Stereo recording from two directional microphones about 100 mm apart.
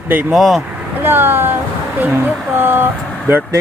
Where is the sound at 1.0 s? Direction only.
20° right (ahead or behind).